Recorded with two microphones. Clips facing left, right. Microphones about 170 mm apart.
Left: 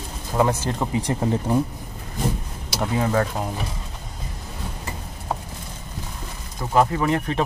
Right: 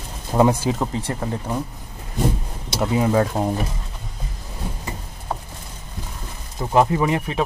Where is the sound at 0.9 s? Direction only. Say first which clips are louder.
Left 3 dB; 15° left (ahead or behind).